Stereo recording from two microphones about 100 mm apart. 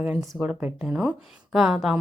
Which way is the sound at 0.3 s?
10° right (ahead or behind).